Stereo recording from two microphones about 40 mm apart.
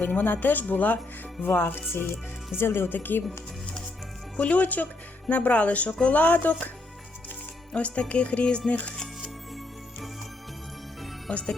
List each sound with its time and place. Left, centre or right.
0.0 s speech: left
1.4 s speech: left
2.6 s speech: left
2.9 s speech: left
4.4 s speech: left
7.7 s speech: left
11.3 s speech: left